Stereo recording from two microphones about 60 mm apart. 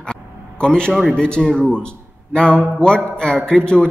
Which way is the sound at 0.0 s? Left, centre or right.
Centre.